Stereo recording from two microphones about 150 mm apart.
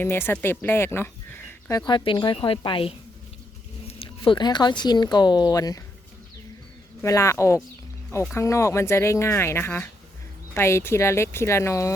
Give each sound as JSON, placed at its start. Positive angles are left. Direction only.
{"t": 0.0, "sound": "speech", "side_deg": 15}
{"t": 1.8, "sound": "speech", "side_deg": 30}
{"t": 4.3, "sound": "speech", "side_deg": 30}
{"t": 7.0, "sound": "speech", "side_deg": 20}